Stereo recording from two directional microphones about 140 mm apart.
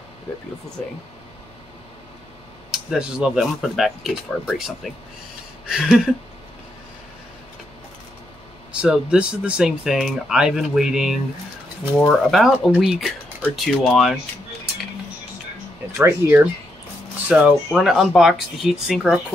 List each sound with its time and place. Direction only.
2.7 s speech: 5° right (ahead or behind)
8.7 s speech: 5° right (ahead or behind)
16.0 s speech: 15° right (ahead or behind); by 19.1 s centre (ahead or behind)